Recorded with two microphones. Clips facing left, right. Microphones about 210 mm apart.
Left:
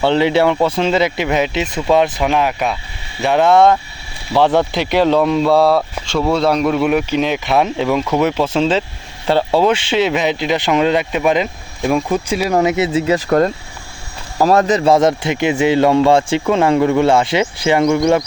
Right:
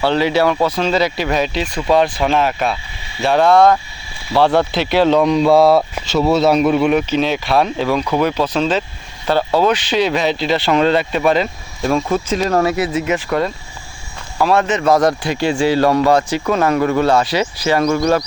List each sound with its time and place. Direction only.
0.0 s speech: 20° left (ahead or behind); by 6.8 s 5° right (ahead or behind)
6.8 s speech: 10° left (ahead or behind)